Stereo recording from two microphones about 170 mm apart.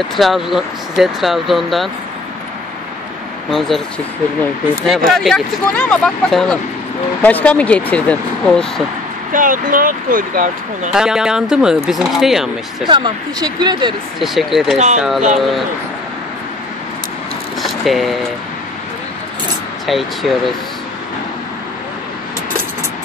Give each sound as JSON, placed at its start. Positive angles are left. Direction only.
{"t": 0.1, "sound": "speech", "side_deg": 0}
{"t": 3.4, "sound": "speech", "side_deg": 0}
{"t": 5.1, "sound": "speech", "side_deg": 5}
{"t": 9.3, "sound": "speech", "side_deg": -50}
{"t": 10.9, "sound": "speech", "side_deg": -5}
{"t": 12.8, "sound": "speech", "side_deg": -25}
{"t": 14.2, "sound": "speech", "side_deg": 0}
{"t": 17.6, "sound": "a sound", "side_deg": 0}
{"t": 19.9, "sound": "speech", "side_deg": 0}